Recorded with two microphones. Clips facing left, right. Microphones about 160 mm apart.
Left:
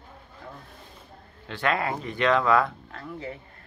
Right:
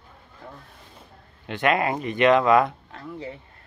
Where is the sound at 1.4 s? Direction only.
20° right (ahead or behind).